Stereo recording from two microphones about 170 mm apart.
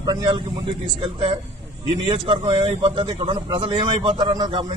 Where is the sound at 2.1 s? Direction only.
30° right (ahead or behind).